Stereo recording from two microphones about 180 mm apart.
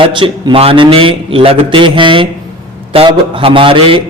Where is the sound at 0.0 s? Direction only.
25° right (ahead or behind).